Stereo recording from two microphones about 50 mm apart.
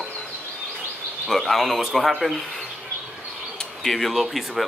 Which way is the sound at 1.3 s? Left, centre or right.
Centre.